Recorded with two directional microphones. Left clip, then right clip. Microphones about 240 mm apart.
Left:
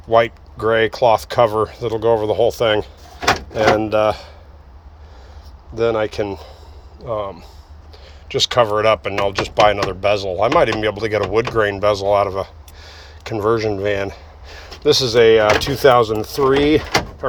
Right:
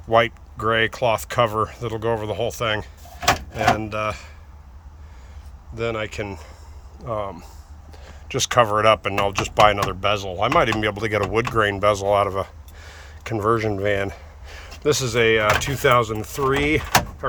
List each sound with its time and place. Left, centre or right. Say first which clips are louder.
0.1 s speech: left 3 dB; centre
5.7 s speech: left 8 dB; centre